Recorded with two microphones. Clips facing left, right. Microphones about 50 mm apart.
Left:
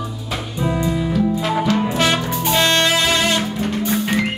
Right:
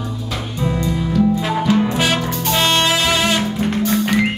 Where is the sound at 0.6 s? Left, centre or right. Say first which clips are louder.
Left 1 dB; centre.